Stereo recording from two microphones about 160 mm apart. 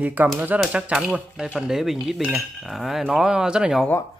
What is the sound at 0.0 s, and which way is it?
Speech, 10° right (ahead or behind).